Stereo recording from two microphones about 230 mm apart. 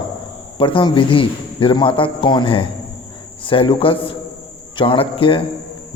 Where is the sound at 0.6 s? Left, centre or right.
Left.